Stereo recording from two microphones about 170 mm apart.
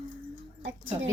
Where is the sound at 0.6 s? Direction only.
90° right.